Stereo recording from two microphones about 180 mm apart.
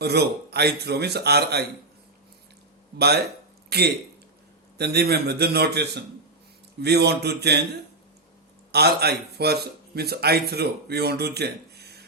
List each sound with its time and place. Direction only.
0.0 s a man's voice: 65° right (ahead or behind)
3.0 s a man's voice: 65° right (ahead or behind)
8.7 s a man's voice: 60° right (ahead or behind)